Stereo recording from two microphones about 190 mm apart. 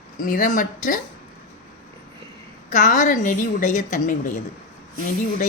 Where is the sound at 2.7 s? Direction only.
40° left (ahead or behind).